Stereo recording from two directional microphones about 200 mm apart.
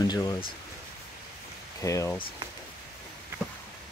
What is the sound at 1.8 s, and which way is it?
Speech, 15° left (ahead or behind).